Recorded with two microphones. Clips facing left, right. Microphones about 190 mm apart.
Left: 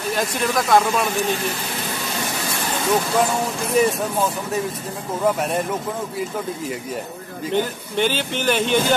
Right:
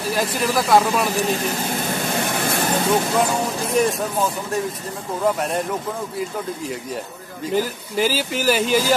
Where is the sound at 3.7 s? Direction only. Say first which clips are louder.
Left 2 dB; centre (ahead or behind).